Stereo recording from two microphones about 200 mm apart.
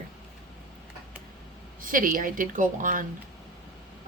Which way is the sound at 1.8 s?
45° right (ahead or behind).